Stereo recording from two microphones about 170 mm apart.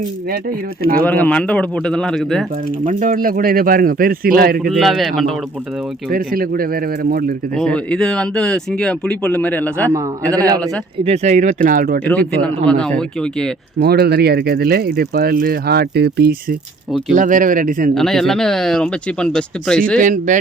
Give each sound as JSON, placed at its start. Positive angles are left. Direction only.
{"t": 0.9, "sound": "speech", "side_deg": 10}
{"t": 2.8, "sound": "speech", "side_deg": -50}
{"t": 4.7, "sound": "speech", "side_deg": 0}
{"t": 6.1, "sound": "speech", "side_deg": -60}
{"t": 7.5, "sound": "speech", "side_deg": 5}
{"t": 9.9, "sound": "a man's voice", "side_deg": -20}
{"t": 11.0, "sound": "speech", "side_deg": -40}
{"t": 12.0, "sound": "speech", "side_deg": 5}
{"t": 13.8, "sound": "speech", "side_deg": -70}
{"t": 17.2, "sound": "speech", "side_deg": -50}
{"t": 17.9, "sound": "speech", "side_deg": 0}
{"t": 20.0, "sound": "speech", "side_deg": -50}